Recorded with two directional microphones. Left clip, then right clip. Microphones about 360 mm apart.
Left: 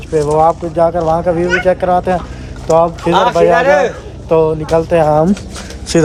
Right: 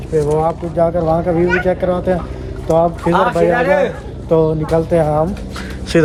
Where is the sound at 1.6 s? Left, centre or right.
Centre.